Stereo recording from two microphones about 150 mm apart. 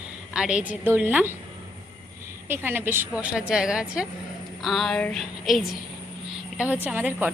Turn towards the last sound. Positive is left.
turn(degrees=-10)  # may be behind; listen again after turning